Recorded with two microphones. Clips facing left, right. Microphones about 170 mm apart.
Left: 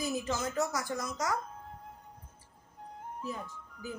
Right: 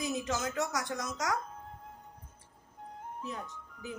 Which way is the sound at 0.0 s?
Centre (ahead or behind).